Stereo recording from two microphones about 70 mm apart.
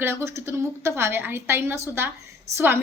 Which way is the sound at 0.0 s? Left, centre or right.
Right.